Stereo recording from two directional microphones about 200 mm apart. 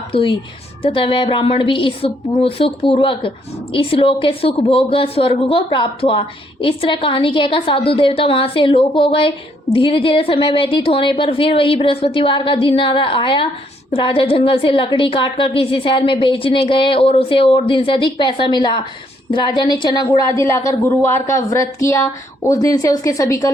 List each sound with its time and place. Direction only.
0.1 s a woman's voice: 25° left (ahead or behind)